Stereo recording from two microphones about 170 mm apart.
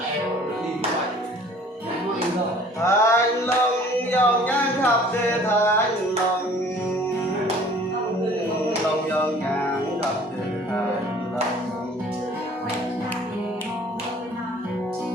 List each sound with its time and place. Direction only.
2.8 s music: 15° left (ahead or behind)
4.1 s a sound: 10° left (ahead or behind)
5.5 s music: 15° left (ahead or behind)